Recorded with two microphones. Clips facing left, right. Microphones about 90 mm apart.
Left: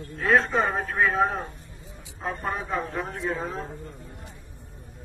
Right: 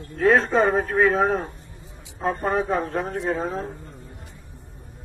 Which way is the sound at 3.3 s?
50° right (ahead or behind).